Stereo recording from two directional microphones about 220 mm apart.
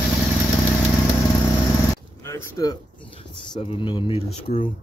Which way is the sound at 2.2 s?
10° left (ahead or behind).